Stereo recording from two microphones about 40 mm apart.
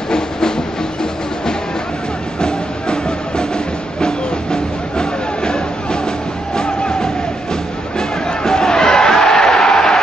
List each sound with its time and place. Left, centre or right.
2.4 s music: left
6.5 s vehicle: centre
8.5 s crowd: centre